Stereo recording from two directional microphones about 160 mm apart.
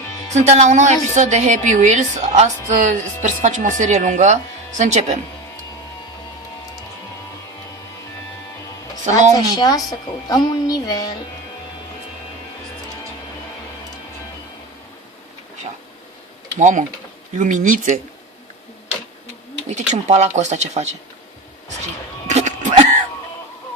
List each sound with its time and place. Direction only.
0.4 s a woman's voice: 45° right (ahead or behind)
9.3 s a woman's voice: 25° left (ahead or behind)
16.6 s a woman's voice: 50° right (ahead or behind)
19.7 s a woman's voice: 45° right (ahead or behind)
22.3 s a sound: 50° right (ahead or behind)